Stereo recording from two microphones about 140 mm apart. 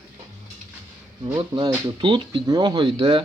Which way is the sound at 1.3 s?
35° right (ahead or behind).